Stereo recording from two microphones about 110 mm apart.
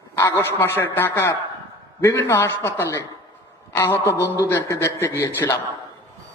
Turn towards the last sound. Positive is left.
turn(degrees=25)  # may be behind; listen again after turning